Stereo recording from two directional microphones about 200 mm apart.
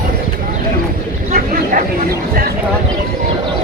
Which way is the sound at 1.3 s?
45° right (ahead or behind).